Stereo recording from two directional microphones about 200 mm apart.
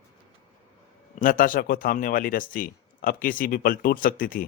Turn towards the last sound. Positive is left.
turn(degrees=45)  # may be behind; listen again after turning